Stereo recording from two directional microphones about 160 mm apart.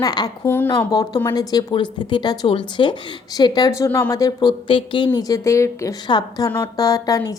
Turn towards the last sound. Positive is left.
turn(degrees=20)  # may be behind; listen again after turning